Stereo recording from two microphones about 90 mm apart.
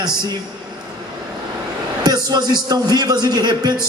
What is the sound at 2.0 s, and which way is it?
A man's voice, 50° right (ahead or behind).